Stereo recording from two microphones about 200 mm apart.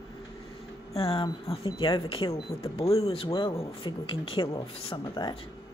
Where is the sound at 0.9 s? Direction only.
30° left (ahead or behind).